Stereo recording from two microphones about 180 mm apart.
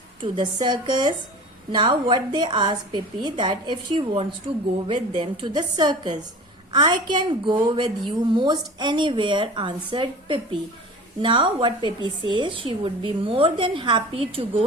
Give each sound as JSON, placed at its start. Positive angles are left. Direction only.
{"t": 0.2, "sound": "a woman's voice", "side_deg": -25}